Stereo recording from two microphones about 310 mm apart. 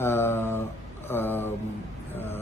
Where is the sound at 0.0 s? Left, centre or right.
Centre.